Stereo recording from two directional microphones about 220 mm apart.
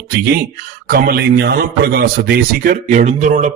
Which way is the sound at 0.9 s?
45° right (ahead or behind).